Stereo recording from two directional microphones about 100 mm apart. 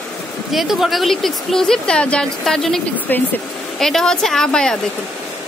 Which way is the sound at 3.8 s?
5° left (ahead or behind).